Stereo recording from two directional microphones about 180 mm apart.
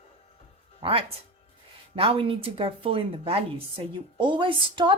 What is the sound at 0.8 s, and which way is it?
Speech, 30° right (ahead or behind).